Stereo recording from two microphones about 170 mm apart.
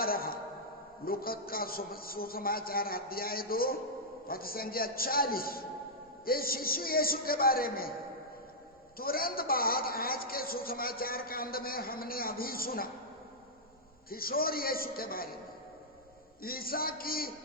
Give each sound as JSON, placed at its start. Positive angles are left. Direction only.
{"t": 0.0, "sound": "a sound", "side_deg": 60}
{"t": 1.0, "sound": "a woman's voice", "side_deg": 60}
{"t": 9.0, "sound": "a woman's voice", "side_deg": 60}
{"t": 14.1, "sound": "a woman's voice", "side_deg": 60}
{"t": 16.4, "sound": "a woman's voice", "side_deg": 60}